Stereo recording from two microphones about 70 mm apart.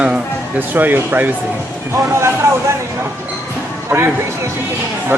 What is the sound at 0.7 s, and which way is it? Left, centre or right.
Speech, right.